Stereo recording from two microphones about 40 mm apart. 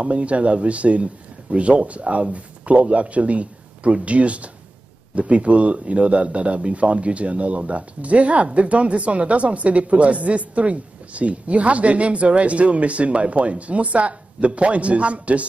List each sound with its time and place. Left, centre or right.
0.0 s speech: right